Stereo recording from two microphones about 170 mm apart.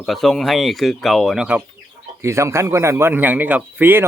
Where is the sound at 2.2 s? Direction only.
15° right (ahead or behind).